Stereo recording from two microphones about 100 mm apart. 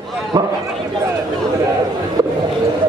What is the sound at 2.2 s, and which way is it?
Speech, 35° right (ahead or behind).